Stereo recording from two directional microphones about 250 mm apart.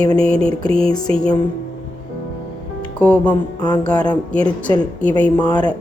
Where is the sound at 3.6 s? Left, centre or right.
Centre.